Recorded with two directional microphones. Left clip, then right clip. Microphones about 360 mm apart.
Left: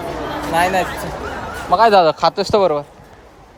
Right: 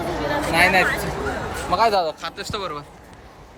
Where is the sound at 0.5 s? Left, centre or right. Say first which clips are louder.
Left 1 dB; centre.